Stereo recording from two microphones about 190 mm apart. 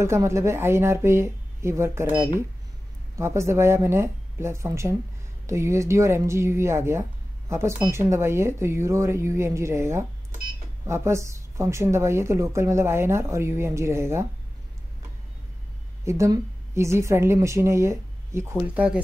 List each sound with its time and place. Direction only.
0.0 s speech: 15° right (ahead or behind)
16.0 s speech: 15° right (ahead or behind)